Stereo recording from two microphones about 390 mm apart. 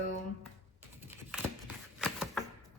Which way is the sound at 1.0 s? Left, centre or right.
Centre.